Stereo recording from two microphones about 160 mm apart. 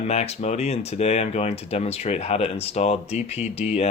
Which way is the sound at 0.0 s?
45° left (ahead or behind).